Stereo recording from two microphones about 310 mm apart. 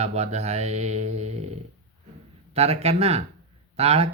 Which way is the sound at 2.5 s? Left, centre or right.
Centre.